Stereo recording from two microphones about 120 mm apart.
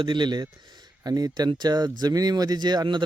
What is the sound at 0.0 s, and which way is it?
Speech, 40° right (ahead or behind).